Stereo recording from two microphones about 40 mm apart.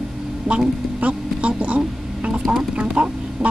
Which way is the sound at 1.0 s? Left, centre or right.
Right.